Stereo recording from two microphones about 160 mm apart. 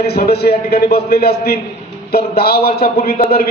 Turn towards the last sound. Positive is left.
turn(degrees=70)  # may be behind; listen again after turning